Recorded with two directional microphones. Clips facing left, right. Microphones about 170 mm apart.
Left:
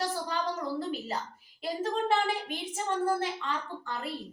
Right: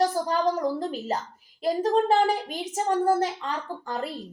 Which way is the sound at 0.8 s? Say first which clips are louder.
Right 4 dB; 45° right (ahead or behind).